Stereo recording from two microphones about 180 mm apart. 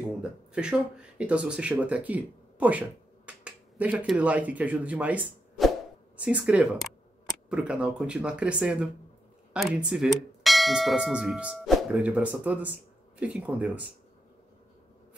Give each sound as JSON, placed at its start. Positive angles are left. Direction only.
{"t": 0.2, "sound": "speech", "side_deg": -5}
{"t": 9.5, "sound": "bell", "side_deg": -5}
{"t": 13.2, "sound": "speech", "side_deg": -10}